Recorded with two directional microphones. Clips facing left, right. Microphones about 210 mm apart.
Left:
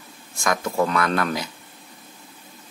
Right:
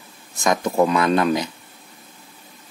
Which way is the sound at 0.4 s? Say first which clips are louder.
Right 4 dB; 20° right (ahead or behind).